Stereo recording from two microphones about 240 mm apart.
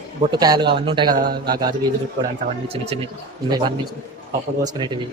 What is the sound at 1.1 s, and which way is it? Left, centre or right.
Speech, right.